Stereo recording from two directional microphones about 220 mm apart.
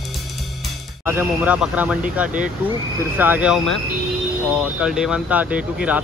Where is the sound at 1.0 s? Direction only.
10° right (ahead or behind).